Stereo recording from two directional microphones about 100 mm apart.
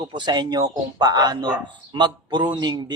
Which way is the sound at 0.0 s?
45° right (ahead or behind).